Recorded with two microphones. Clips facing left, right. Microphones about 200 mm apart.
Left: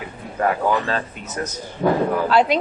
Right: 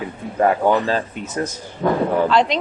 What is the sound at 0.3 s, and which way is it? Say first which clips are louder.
Speech: right 4 dB; 25° right (ahead or behind).